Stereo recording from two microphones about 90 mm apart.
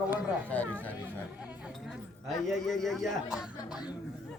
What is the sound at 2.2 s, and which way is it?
A man's voice, centre (ahead or behind).